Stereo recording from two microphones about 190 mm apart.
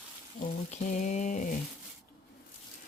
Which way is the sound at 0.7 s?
40° left (ahead or behind).